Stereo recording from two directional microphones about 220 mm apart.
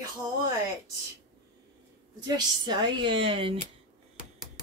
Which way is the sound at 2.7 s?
20° right (ahead or behind).